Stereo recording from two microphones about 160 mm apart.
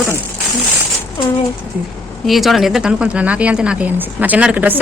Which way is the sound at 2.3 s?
Centre (ahead or behind).